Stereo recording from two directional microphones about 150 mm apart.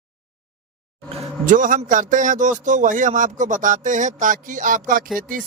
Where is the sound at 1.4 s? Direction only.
60° right (ahead or behind).